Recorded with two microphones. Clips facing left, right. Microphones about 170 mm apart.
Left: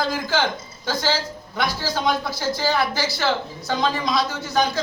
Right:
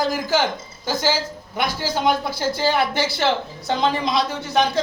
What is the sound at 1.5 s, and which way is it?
Speech, 20° right (ahead or behind).